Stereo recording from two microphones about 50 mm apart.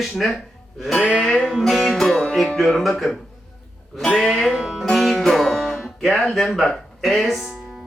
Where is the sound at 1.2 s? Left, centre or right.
Centre.